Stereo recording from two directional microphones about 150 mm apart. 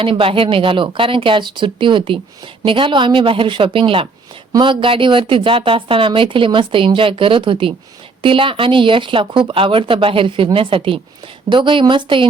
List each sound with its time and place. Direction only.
0.0 s speech: 35° right (ahead or behind)